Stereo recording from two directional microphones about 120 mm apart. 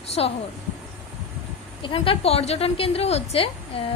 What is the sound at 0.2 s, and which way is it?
Speech, 55° left (ahead or behind).